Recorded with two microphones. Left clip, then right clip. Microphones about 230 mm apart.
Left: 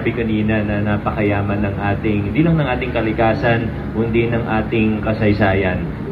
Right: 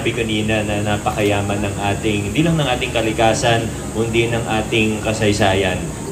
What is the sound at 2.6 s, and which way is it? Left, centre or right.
A man's voice, right.